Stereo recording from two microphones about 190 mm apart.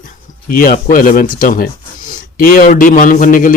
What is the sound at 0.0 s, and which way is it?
Speech, 45° left (ahead or behind).